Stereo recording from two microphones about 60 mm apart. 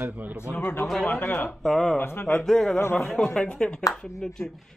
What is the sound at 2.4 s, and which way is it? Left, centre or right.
A man's voice, centre.